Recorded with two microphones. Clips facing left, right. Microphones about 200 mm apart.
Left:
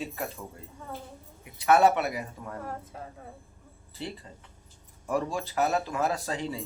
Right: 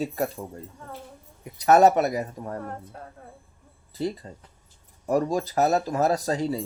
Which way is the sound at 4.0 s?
40° right (ahead or behind).